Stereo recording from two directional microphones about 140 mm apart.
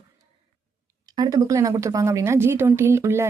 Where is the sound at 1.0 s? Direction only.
25° right (ahead or behind).